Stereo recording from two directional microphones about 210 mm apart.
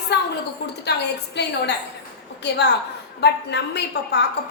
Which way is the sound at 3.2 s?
55° left (ahead or behind).